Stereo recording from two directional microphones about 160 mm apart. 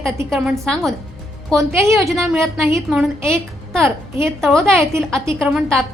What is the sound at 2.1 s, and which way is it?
A woman's voice, centre (ahead or behind).